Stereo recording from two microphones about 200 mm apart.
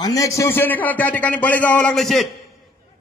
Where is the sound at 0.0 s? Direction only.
15° left (ahead or behind); by 2.2 s centre (ahead or behind).